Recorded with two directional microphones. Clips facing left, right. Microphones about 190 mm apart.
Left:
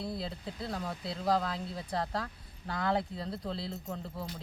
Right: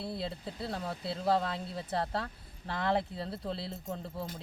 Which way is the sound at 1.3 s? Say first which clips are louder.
Even; 30° right (ahead or behind).